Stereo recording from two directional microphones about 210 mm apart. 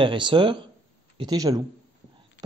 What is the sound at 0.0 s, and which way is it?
Speech, 20° right (ahead or behind).